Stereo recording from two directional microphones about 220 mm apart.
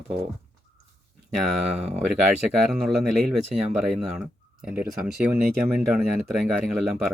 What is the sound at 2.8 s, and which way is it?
Speech, centre (ahead or behind).